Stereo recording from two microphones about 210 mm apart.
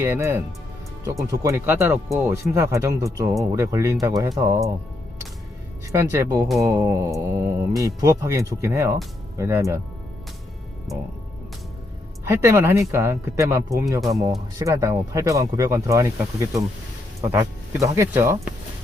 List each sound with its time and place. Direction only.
0.0 s speech: 10° right (ahead or behind)
5.9 s speech: 15° right (ahead or behind)
10.9 s speech: centre (ahead or behind)
12.2 s speech: 10° right (ahead or behind)